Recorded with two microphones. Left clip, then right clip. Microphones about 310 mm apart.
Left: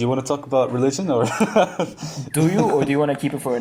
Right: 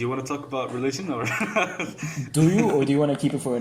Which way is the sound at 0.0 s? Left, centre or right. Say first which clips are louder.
Left 6 dB; centre.